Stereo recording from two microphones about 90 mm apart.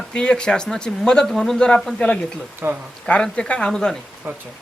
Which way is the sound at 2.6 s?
20° right (ahead or behind).